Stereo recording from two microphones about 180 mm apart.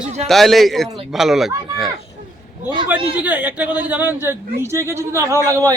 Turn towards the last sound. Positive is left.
turn(degrees=-15)  # may be behind; listen again after turning